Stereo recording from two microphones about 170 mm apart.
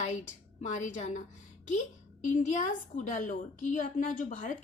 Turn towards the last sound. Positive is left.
turn(degrees=50)  # may be behind; listen again after turning